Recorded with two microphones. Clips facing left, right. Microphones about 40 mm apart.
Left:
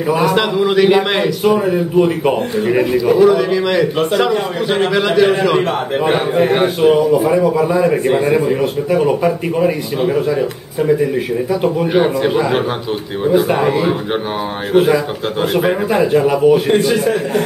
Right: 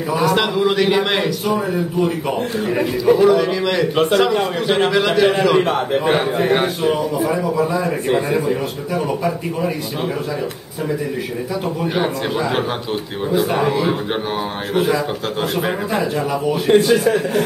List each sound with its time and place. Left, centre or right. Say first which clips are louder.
0.1 s a man's voice: left 2 dB; centre
1.4 s speech: left 6 dB; left
3.1 s a man's voice: left 1 dB; centre; by 9.7 s left
11.6 s speech: left 6 dB; centre
16.6 s speech: even; centre